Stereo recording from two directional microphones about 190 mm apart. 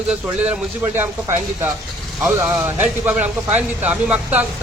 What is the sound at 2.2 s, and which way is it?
Speech, 5° right (ahead or behind).